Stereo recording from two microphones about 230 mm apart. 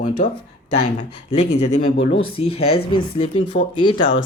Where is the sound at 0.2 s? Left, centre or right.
Left.